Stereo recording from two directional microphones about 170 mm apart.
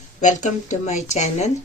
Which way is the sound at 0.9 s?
45° left (ahead or behind).